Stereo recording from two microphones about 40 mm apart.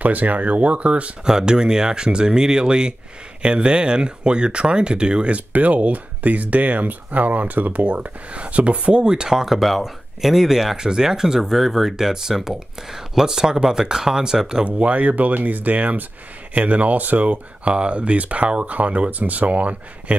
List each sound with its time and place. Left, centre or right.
0.0 s speech: right
1.2 s speech: centre
9.0 s speech: centre
14.5 s speech: right